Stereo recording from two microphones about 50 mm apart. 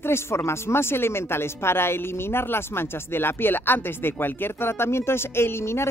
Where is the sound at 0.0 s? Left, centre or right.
Left.